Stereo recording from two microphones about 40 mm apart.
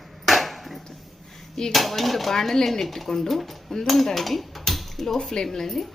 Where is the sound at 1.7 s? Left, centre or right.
Centre.